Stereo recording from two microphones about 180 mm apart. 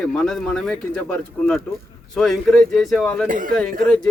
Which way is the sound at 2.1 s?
5° left (ahead or behind).